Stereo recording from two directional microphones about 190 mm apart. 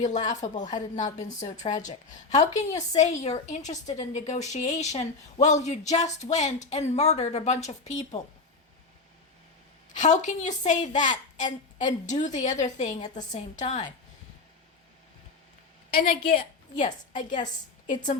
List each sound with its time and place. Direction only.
0.0 s a woman's voice: 40° left (ahead or behind)
9.9 s a woman's voice: 40° left (ahead or behind)
15.9 s a woman's voice: 50° left (ahead or behind)